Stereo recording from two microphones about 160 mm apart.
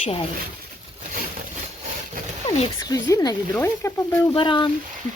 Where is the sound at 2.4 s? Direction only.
25° left (ahead or behind).